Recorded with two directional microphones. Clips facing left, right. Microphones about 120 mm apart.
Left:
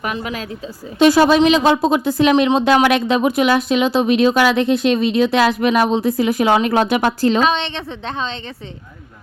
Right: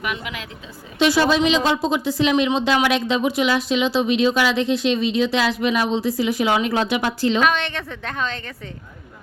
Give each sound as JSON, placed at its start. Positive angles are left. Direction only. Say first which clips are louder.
{"t": 0.0, "sound": "speech", "louder": "left 4 dB", "side_deg": 35}
{"t": 0.9, "sound": "speech", "louder": "left 6 dB", "side_deg": 45}
{"t": 7.4, "sound": "a woman's voice", "louder": "left 2 dB", "side_deg": 25}